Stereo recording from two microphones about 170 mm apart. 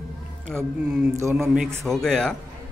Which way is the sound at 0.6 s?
5° right (ahead or behind).